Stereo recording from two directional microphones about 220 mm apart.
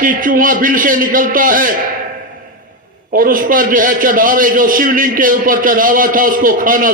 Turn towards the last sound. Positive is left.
turn(degrees=-40)  # may be behind; listen again after turning